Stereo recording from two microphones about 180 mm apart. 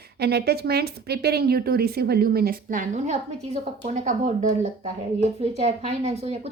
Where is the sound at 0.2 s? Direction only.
65° right (ahead or behind).